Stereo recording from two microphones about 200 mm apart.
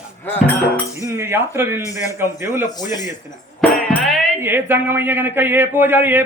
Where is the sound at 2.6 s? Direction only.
20° left (ahead or behind).